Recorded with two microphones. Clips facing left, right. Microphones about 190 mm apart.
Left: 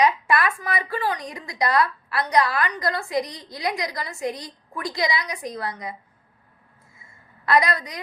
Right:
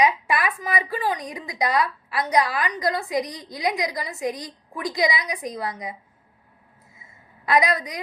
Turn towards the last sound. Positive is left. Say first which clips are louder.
# even
turn(degrees=-20)  # may be behind; listen again after turning